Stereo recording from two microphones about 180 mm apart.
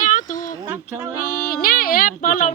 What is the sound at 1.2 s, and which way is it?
Child singing, 55° left (ahead or behind).